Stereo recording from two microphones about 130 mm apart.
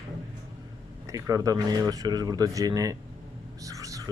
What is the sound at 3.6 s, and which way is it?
Whispering, 25° right (ahead or behind).